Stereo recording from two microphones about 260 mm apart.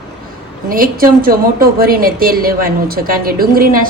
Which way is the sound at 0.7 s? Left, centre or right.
Right.